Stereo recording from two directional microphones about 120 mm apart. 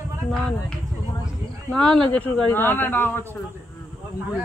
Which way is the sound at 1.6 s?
10° left (ahead or behind).